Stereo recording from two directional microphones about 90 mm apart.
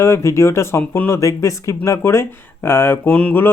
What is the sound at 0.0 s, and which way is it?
Speech, 35° left (ahead or behind).